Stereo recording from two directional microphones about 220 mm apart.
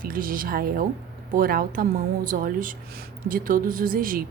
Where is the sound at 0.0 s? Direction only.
40° right (ahead or behind).